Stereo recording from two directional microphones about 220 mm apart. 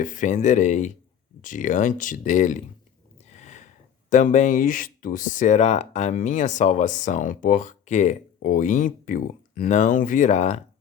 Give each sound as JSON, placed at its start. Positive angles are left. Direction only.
{"t": 0.0, "sound": "speech", "side_deg": 35}
{"t": 3.2, "sound": "a sound", "side_deg": 30}
{"t": 4.1, "sound": "speech", "side_deg": 35}